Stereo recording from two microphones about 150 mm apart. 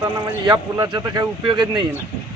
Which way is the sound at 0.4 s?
25° right (ahead or behind).